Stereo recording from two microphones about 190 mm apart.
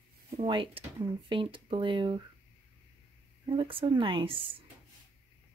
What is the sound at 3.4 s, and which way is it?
Speech, 25° right (ahead or behind).